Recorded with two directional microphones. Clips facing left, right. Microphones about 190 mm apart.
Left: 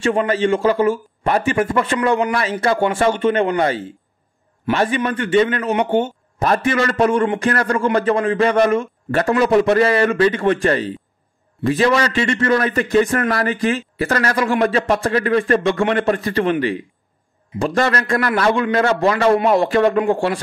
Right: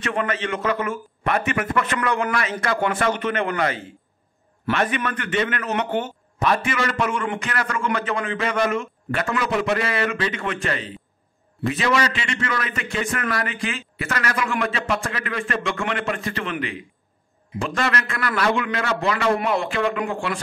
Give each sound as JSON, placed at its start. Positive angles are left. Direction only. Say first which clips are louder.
{"t": 0.0, "sound": "a man's voice", "louder": "left 8 dB", "side_deg": 30}
{"t": 6.4, "sound": "a man's voice", "louder": "left 5 dB", "side_deg": 40}